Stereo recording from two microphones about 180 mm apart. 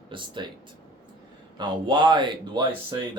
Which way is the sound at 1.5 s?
25° right (ahead or behind).